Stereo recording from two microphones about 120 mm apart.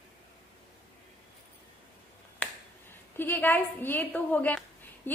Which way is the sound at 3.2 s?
15° left (ahead or behind).